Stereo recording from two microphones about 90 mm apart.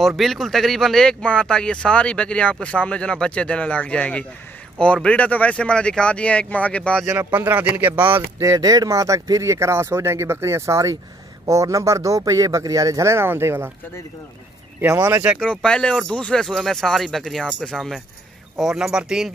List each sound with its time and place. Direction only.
0.0 s speech: centre (ahead or behind)
7.2 s speech: 20° right (ahead or behind)
8.4 s speech: 40° right (ahead or behind)
15.4 s speech: 10° left (ahead or behind); by 19.3 s 5° right (ahead or behind)